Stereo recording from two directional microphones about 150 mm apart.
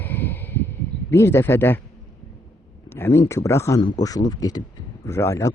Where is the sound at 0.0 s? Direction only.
15° left (ahead or behind).